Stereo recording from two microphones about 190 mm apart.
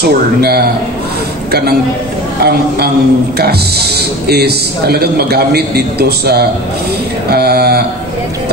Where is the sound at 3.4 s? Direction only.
55° right (ahead or behind).